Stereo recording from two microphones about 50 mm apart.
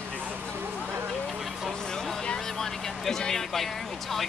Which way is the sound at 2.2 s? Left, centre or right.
Centre.